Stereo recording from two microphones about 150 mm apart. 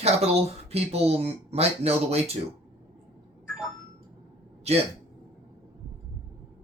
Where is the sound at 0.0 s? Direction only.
45° right (ahead or behind).